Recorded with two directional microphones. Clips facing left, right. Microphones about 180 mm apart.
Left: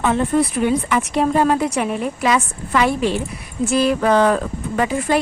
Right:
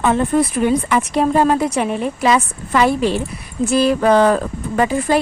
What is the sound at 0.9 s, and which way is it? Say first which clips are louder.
Speech: right 2 dB; 35° right (ahead or behind).